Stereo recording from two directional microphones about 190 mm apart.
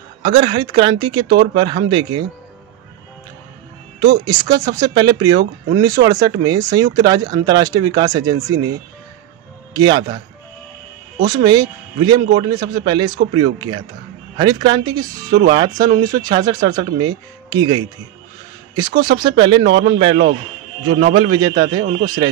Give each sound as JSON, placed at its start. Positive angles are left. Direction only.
{"t": 0.2, "sound": "speech", "side_deg": -25}
{"t": 4.0, "sound": "speech", "side_deg": -20}
{"t": 9.8, "sound": "speech", "side_deg": -20}
{"t": 11.1, "sound": "speech", "side_deg": -20}
{"t": 21.1, "sound": "speech", "side_deg": -25}